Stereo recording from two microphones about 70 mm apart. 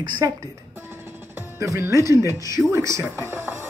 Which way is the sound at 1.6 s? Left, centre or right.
Right.